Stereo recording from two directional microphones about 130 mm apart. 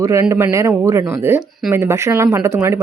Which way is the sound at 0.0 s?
25° right (ahead or behind).